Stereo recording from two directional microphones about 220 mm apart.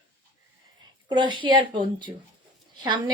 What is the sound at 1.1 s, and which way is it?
A woman's voice, 20° right (ahead or behind).